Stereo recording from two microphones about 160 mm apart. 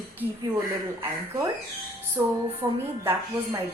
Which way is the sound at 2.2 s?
15° right (ahead or behind).